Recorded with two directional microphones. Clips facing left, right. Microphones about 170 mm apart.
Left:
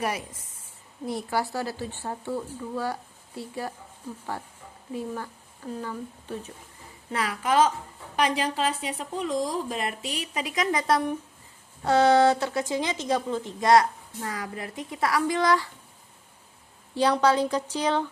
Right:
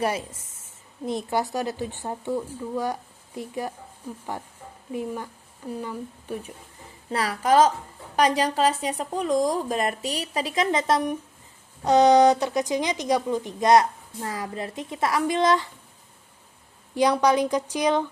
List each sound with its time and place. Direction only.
0.0 s speech: 25° right (ahead or behind)
7.1 s speech: 35° right (ahead or behind); by 15.7 s 20° right (ahead or behind)
16.9 s speech: 15° right (ahead or behind)